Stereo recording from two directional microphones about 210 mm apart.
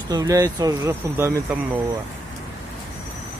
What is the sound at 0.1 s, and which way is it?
Speech, 15° right (ahead or behind).